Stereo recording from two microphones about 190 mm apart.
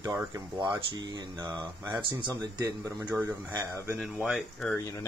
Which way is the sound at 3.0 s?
10° right (ahead or behind).